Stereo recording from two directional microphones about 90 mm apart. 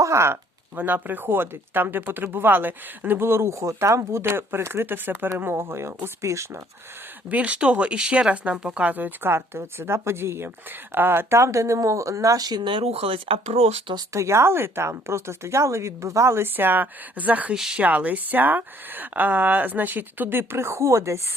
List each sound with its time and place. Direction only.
0.0 s speech: 30° right (ahead or behind)
0.8 s speech: 20° right (ahead or behind)
7.3 s speech: 15° right (ahead or behind); by 13.4 s 85° right
14.1 s speech: 35° right (ahead or behind); by 17.5 s 20° right (ahead or behind)
17.5 s speech: 5° right (ahead or behind)
17.8 s speech: 15° right (ahead or behind); by 21.2 s 35° right (ahead or behind)